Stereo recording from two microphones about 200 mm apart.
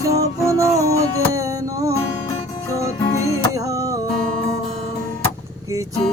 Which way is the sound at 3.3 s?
15° right (ahead or behind).